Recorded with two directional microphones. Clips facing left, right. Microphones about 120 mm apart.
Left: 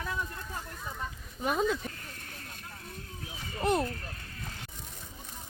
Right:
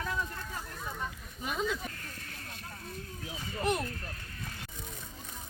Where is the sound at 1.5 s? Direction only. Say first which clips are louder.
Left 5 dB; 45° left (ahead or behind).